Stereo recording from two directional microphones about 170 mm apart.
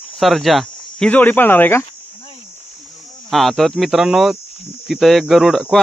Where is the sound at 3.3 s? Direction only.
Centre (ahead or behind).